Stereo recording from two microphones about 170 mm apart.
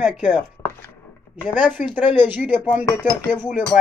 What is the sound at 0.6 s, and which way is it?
Chopping, 20° left (ahead or behind).